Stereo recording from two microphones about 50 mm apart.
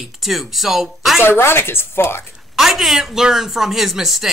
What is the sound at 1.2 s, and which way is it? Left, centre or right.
Speech, left.